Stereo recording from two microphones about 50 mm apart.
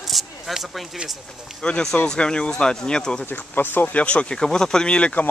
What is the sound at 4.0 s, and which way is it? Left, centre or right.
Speech, left.